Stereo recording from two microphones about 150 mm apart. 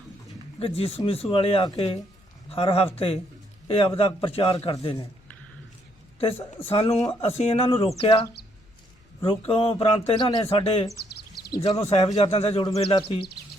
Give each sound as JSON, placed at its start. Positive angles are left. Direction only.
{"t": 0.6, "sound": "a man's voice", "side_deg": 40}
{"t": 6.1, "sound": "a woman's voice", "side_deg": 40}